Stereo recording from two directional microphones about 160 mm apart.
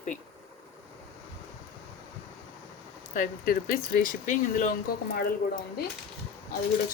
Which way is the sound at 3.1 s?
55° left (ahead or behind).